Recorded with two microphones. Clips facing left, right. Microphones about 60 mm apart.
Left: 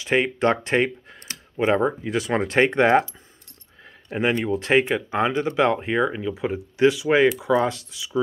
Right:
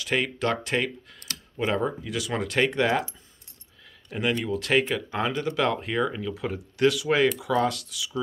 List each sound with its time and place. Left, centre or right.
0.0 s speech: left
4.1 s speech: left